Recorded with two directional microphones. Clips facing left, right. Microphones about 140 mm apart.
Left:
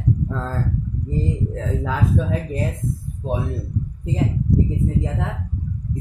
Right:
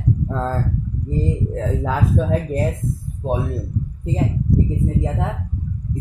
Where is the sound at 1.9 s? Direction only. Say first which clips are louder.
Right 2 dB; 50° right (ahead or behind).